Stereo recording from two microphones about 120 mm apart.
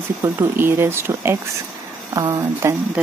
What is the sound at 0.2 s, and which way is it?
Speech, 20° right (ahead or behind).